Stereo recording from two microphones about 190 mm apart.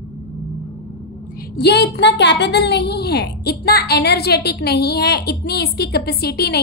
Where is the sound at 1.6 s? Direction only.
60° left (ahead or behind).